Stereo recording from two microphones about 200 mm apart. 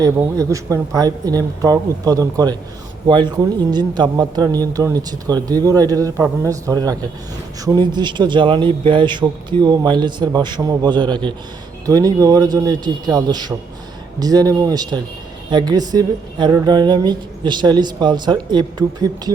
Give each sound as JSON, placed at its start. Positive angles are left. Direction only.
{"t": 0.0, "sound": "a man's voice", "side_deg": -15}